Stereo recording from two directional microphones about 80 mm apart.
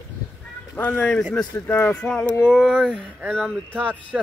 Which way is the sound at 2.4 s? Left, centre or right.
Centre.